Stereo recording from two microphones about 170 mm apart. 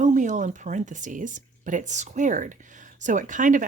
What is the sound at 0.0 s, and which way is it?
Speech, 45° right (ahead or behind).